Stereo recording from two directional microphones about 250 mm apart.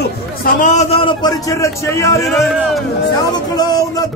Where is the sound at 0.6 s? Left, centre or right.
Left; by 2.2 s centre.